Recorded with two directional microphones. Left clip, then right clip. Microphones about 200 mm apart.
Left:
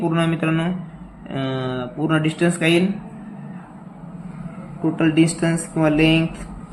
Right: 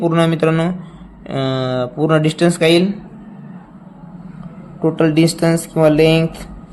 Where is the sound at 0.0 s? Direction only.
50° right (ahead or behind).